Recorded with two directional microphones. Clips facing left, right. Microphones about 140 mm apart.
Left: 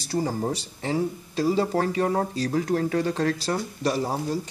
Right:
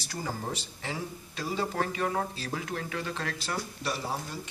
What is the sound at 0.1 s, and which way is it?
Speech, 35° left (ahead or behind).